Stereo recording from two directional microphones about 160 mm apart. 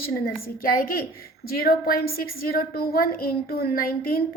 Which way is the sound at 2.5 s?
70° left (ahead or behind).